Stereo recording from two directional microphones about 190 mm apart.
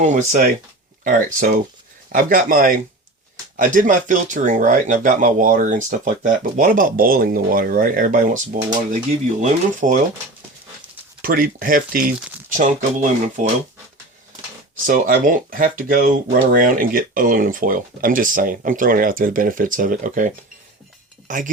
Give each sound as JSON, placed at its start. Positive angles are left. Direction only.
{"t": 0.0, "sound": "speech", "side_deg": -35}
{"t": 9.4, "sound": "speech", "side_deg": -40}
{"t": 11.2, "sound": "speech", "side_deg": -50}
{"t": 14.8, "sound": "speech", "side_deg": -45}